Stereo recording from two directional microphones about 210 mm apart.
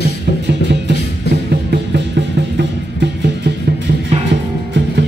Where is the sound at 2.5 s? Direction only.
55° right (ahead or behind).